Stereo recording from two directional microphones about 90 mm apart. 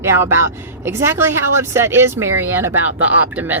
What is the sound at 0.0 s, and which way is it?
Speech, 30° right (ahead or behind).